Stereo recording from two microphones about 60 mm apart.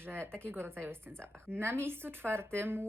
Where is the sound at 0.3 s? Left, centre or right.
Right.